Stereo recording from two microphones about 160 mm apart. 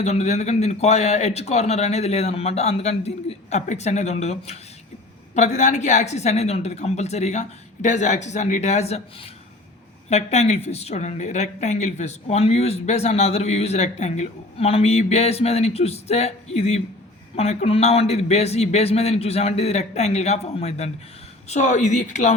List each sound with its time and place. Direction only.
0.0 s a man's voice: 45° left (ahead or behind)
10.1 s a man's voice: 40° left (ahead or behind)